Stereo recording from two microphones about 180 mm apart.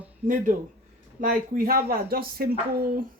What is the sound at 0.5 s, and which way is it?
A man's voice, 50° right (ahead or behind).